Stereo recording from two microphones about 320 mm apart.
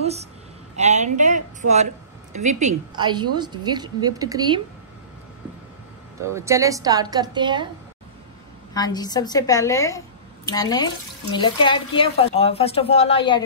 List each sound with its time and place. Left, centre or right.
0.0 s a woman's voice: centre
6.2 s a woman's voice: centre
8.7 s a woman's voice: centre